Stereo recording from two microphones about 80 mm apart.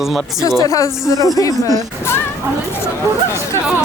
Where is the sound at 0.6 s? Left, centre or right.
Left.